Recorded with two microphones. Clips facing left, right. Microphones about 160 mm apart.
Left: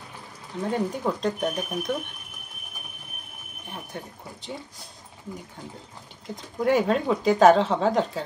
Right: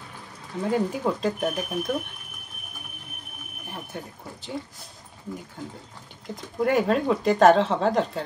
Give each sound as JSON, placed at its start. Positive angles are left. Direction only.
{"t": 0.6, "sound": "speech", "side_deg": -5}
{"t": 3.6, "sound": "speech", "side_deg": 0}
{"t": 6.2, "sound": "speech", "side_deg": 0}